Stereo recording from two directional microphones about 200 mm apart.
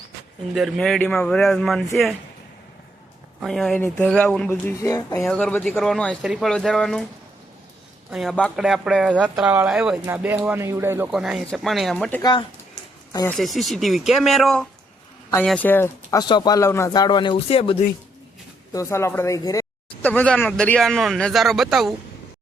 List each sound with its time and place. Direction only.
0.5 s speech: centre (ahead or behind)
3.4 s speech: centre (ahead or behind); by 5.2 s 20° left (ahead or behind)
5.2 s speech: 5° left (ahead or behind)
8.1 s speech: centre (ahead or behind)
12.2 s speech: 25° left (ahead or behind)
13.3 s speech: centre (ahead or behind)
16.2 s speech: 20° left (ahead or behind)
18.7 s speech: 15° left (ahead or behind); by 21.9 s centre (ahead or behind)